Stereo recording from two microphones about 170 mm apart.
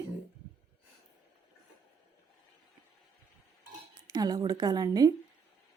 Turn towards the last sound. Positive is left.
turn(degrees=-25)  # may be behind; listen again after turning